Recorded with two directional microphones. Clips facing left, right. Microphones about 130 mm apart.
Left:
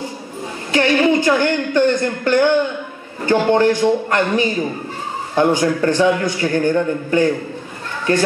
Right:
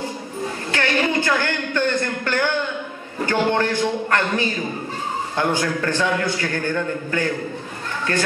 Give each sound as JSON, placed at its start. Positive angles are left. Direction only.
{"t": 0.7, "sound": "a man's voice", "side_deg": 15}